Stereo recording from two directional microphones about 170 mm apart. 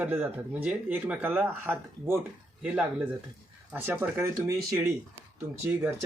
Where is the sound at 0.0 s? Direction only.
10° right (ahead or behind).